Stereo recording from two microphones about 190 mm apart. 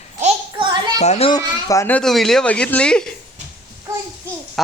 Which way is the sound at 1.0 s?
35° left (ahead or behind).